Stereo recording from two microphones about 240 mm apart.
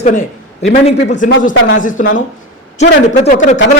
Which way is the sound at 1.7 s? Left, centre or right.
Left.